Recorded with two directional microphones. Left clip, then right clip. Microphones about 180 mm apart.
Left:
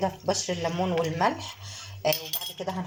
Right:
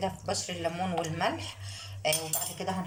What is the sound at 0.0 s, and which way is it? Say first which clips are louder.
Speech: left 5 dB; 20° left (ahead or behind).